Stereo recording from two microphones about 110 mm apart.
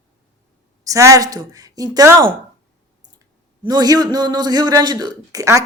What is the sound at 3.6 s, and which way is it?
Speech, 35° right (ahead or behind).